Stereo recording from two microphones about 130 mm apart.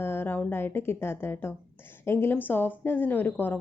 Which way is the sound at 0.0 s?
15° left (ahead or behind).